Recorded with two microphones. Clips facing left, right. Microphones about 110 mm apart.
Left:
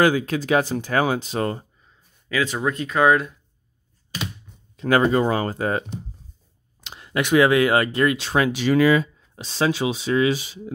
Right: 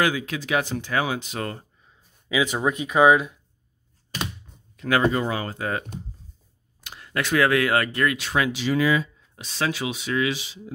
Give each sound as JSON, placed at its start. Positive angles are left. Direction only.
{"t": 0.0, "sound": "speech", "side_deg": 40}
{"t": 1.9, "sound": "speech", "side_deg": -10}
{"t": 4.7, "sound": "speech", "side_deg": 35}
{"t": 8.5, "sound": "speech", "side_deg": 55}
{"t": 9.3, "sound": "speech", "side_deg": 30}